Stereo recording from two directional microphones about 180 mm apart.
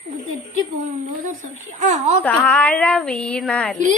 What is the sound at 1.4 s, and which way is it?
Speech, 45° right (ahead or behind).